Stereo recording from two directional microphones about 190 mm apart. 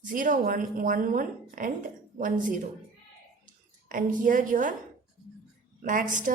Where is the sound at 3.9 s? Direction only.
45° right (ahead or behind).